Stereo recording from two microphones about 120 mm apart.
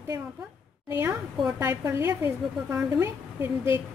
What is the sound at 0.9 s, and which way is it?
A woman's voice, 20° right (ahead or behind).